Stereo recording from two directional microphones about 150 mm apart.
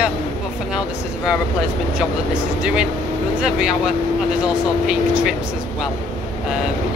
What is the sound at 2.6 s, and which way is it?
Speech, 5° right (ahead or behind).